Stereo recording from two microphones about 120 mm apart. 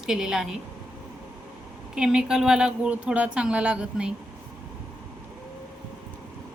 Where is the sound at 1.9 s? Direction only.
5° right (ahead or behind).